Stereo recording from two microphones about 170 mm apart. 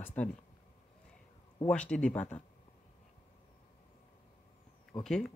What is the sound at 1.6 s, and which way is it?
Speech, 5° left (ahead or behind).